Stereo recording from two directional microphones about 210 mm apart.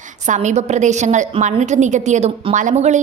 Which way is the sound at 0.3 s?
35° right (ahead or behind).